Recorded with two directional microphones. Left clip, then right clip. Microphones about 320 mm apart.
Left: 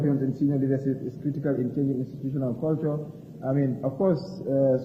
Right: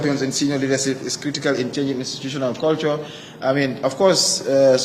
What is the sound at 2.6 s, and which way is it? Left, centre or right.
Speech, centre.